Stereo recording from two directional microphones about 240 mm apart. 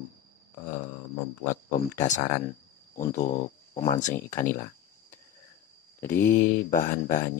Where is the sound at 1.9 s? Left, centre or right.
Left.